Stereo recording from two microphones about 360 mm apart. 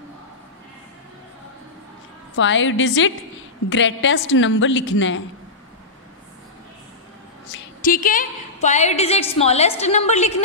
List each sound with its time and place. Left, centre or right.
2.3 s a woman's voice: left
7.5 s a woman's voice: left